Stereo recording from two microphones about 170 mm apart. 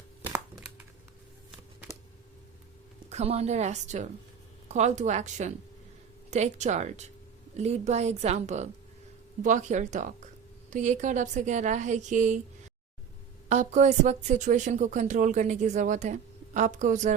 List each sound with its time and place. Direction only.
0.2 s crumpling: 15° right (ahead or behind)
3.1 s a woman's voice: 40° right (ahead or behind)
13.5 s speech: 45° right (ahead or behind)